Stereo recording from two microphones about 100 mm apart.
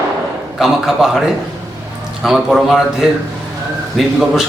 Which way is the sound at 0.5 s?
5° right (ahead or behind).